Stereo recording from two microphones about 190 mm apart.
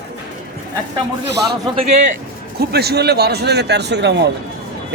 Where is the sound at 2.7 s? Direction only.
60° right (ahead or behind).